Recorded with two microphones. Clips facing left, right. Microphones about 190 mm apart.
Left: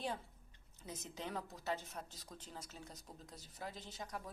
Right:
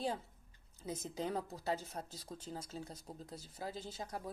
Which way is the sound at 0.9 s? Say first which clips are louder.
Right 7 dB; 30° right (ahead or behind).